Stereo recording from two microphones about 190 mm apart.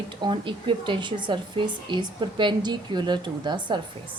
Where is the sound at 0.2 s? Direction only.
25° right (ahead or behind).